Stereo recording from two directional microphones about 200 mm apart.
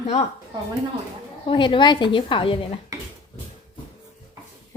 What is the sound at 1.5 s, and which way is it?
A woman's voice, 25° left (ahead or behind).